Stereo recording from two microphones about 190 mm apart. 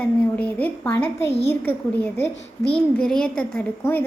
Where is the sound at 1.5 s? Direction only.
10° left (ahead or behind).